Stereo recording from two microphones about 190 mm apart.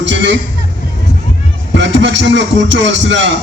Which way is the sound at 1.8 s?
70° right (ahead or behind).